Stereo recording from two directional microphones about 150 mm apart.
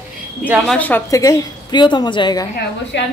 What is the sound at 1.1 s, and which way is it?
A woman's voice, 25° left (ahead or behind).